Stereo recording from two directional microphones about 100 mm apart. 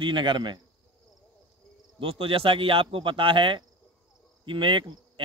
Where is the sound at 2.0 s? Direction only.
65° right (ahead or behind).